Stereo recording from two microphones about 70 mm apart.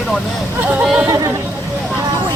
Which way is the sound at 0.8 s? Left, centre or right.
Centre.